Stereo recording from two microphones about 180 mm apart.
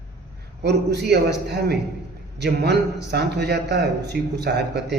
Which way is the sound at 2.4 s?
65° right (ahead or behind).